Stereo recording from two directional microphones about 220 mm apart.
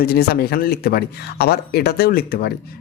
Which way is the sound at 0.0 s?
45° left (ahead or behind).